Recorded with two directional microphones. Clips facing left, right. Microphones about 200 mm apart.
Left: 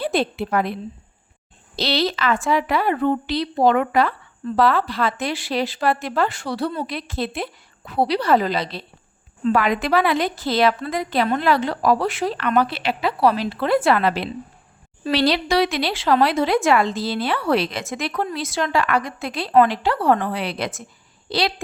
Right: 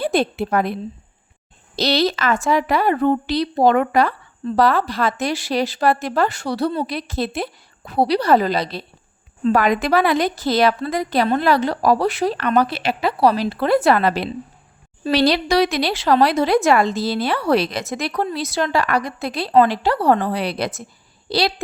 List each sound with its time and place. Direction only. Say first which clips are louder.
0.0 s a woman's voice: right 2 dB; 45° right (ahead or behind)
1.7 s a woman's voice: right 3 dB; 45° right (ahead or behind)